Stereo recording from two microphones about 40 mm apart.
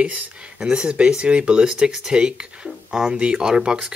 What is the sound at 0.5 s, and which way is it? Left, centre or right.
Speech, centre.